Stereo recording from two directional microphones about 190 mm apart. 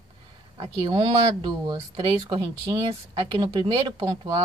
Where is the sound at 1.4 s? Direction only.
25° right (ahead or behind).